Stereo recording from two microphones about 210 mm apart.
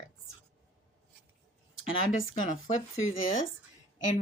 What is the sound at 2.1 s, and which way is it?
A woman's voice, 35° left (ahead or behind).